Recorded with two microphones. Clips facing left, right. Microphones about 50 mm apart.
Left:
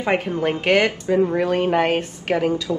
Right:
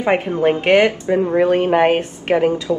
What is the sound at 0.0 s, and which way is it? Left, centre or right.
A woman's voice, right.